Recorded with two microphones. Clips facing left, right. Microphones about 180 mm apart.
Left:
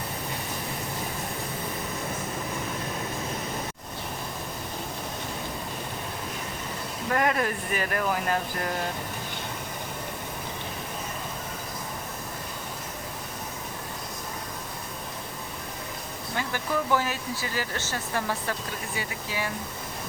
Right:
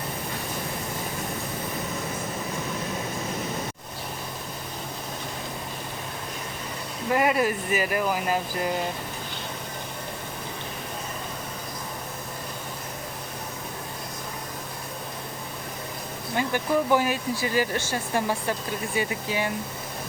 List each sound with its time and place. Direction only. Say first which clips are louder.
7.1 s speech: right 3 dB; 10° right (ahead or behind)
16.3 s speech: right 5 dB; 20° right (ahead or behind)